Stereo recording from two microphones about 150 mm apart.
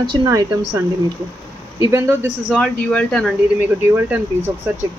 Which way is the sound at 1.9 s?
20° right (ahead or behind).